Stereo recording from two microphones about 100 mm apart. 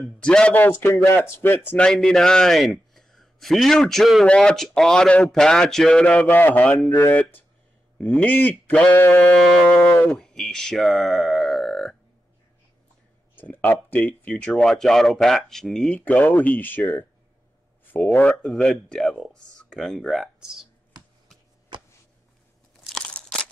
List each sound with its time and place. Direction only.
0.2 s speech: 10° left (ahead or behind)
0.7 s speech: 25° left (ahead or behind)
1.8 s a man's voice: 5° left (ahead or behind); by 9.2 s 20° left (ahead or behind)
10.0 s speech: 5° left (ahead or behind)
13.4 s speech: 20° left (ahead or behind)
14.5 s speech: 5° left (ahead or behind)
16.0 s speech: 15° left (ahead or behind)
18.1 s speech: 15° left (ahead or behind)
18.4 s speech: 5° left (ahead or behind)
22.8 s crunch: 10° left (ahead or behind)